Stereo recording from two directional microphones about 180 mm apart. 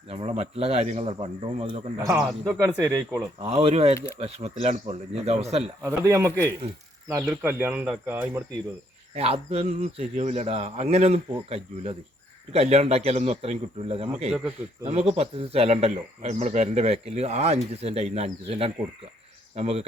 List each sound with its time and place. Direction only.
0.1 s speech: 35° right (ahead or behind)
2.2 s speech: 5° right (ahead or behind)
3.4 s speech: 35° right (ahead or behind)
5.8 s speech: 15° right (ahead or behind)
9.1 s speech: 35° right (ahead or behind)